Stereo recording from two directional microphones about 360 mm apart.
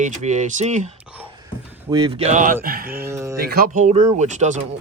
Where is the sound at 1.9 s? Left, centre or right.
Centre.